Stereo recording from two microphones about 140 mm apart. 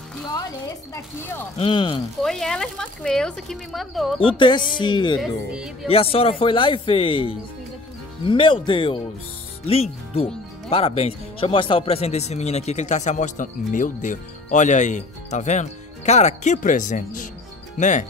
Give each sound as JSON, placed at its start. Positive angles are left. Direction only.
{"t": 0.9, "sound": "speech", "side_deg": 15}
{"t": 1.6, "sound": "speech", "side_deg": 40}
{"t": 2.2, "sound": "speech", "side_deg": 5}
{"t": 4.2, "sound": "speech", "side_deg": 35}
{"t": 5.2, "sound": "speech", "side_deg": -5}
{"t": 5.9, "sound": "speech", "side_deg": 45}